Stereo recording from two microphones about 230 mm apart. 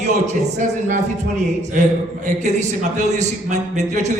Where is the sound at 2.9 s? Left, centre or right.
Right.